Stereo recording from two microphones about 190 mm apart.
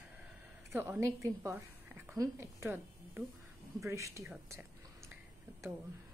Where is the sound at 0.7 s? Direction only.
15° right (ahead or behind).